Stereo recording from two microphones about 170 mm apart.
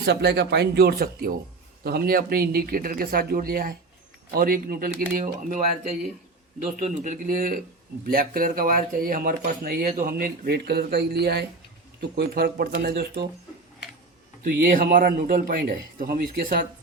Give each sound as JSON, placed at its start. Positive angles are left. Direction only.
{"t": 0.0, "sound": "a man's voice", "side_deg": -75}
{"t": 11.9, "sound": "speech", "side_deg": -65}
{"t": 14.4, "sound": "speech", "side_deg": -60}